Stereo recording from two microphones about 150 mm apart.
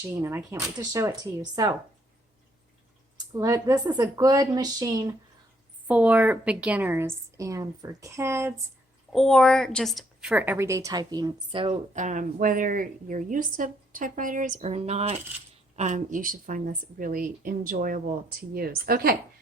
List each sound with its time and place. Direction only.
0.2 s speech: 20° right (ahead or behind)
3.3 s speech: 20° right (ahead or behind)
5.9 s a woman's voice: 10° right (ahead or behind)
9.1 s a woman's voice: 5° left (ahead or behind); by 11.8 s 35° right (ahead or behind)
11.9 s a woman's voice: 55° right (ahead or behind)
14.6 s a woman's voice: 45° right (ahead or behind); by 19.1 s 90° right